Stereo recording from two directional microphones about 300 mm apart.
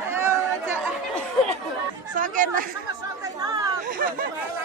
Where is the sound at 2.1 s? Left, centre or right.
Right.